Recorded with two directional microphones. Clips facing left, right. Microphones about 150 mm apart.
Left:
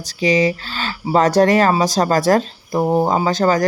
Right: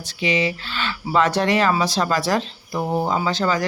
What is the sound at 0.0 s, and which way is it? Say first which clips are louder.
Speech: left 6 dB; 40° left (ahead or behind).